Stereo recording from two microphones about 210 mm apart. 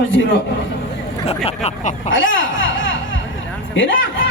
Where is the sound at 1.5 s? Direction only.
30° left (ahead or behind).